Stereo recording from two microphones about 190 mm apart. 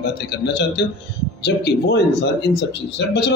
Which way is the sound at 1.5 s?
60° left (ahead or behind).